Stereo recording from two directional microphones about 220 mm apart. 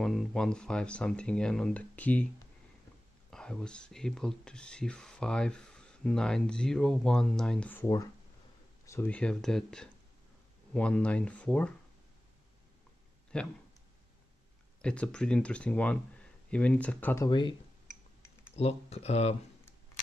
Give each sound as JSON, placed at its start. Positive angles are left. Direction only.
{"t": 0.0, "sound": "speech", "side_deg": 0}
{"t": 3.3, "sound": "speech", "side_deg": 5}
{"t": 13.3, "sound": "speech", "side_deg": 5}
{"t": 14.8, "sound": "speech", "side_deg": 5}
{"t": 18.6, "sound": "speech", "side_deg": 30}